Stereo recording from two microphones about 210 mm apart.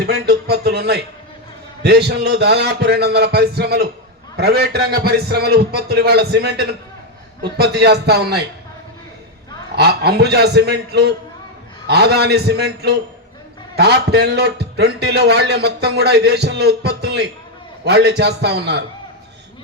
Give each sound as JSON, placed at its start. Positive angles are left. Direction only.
{"t": 0.0, "sound": "a man's voice", "side_deg": -50}
{"t": 9.7, "sound": "a man's voice", "side_deg": -50}